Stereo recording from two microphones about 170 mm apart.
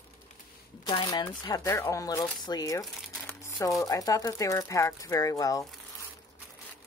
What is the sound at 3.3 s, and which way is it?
Crumpling, 15° left (ahead or behind).